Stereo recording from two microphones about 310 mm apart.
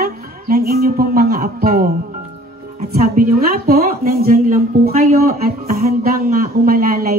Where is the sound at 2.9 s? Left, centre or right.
Right.